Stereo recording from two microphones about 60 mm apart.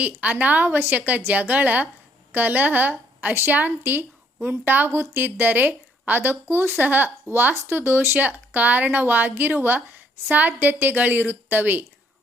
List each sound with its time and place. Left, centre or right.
0.2 s a woman's voice: right